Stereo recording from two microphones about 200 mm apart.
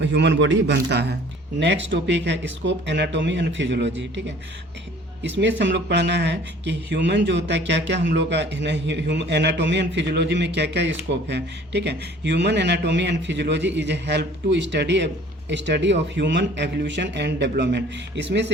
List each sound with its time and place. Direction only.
0.0 s speech: 60° right (ahead or behind)
5.2 s speech: 60° right (ahead or behind)